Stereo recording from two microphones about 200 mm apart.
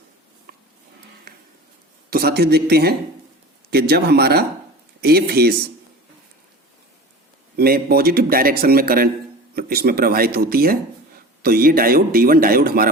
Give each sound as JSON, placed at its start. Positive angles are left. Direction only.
{"t": 2.0, "sound": "a man's voice", "side_deg": -50}
{"t": 7.5, "sound": "a man's voice", "side_deg": -50}